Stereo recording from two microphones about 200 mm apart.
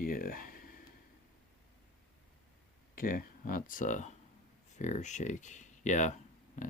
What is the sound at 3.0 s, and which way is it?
Speech, 45° left (ahead or behind).